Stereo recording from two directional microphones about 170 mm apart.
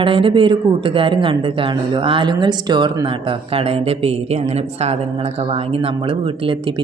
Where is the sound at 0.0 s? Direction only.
30° right (ahead or behind).